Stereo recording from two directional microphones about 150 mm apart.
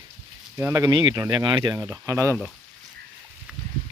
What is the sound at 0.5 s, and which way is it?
Speech, 20° right (ahead or behind).